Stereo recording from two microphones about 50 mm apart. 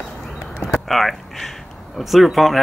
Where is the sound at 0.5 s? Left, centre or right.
Centre.